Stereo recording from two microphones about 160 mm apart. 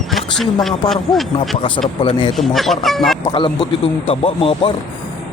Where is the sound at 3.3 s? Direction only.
30° left (ahead or behind).